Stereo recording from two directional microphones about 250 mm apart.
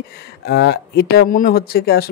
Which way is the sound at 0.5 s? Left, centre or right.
Left.